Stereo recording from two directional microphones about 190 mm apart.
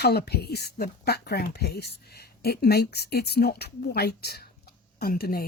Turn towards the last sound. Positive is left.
turn(degrees=50)  # may be behind; listen again after turning